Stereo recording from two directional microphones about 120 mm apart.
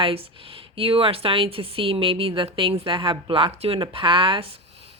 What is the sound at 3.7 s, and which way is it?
Speech, 45° right (ahead or behind).